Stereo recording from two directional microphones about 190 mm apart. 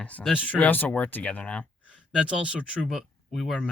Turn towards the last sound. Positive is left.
turn(degrees=0)  # may be behind; listen again after turning